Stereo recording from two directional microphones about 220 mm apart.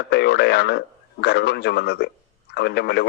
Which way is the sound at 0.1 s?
50° left (ahead or behind).